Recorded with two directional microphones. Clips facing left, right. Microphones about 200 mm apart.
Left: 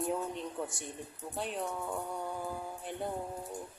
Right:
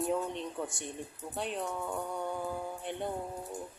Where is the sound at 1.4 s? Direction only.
Centre (ahead or behind).